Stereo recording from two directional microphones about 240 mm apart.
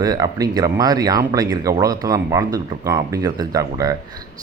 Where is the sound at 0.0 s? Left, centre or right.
Centre.